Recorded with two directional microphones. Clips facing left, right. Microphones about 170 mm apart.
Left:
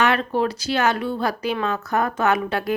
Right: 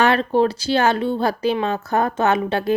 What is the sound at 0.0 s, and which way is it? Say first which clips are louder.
Speech: right 4 dB; 30° right (ahead or behind).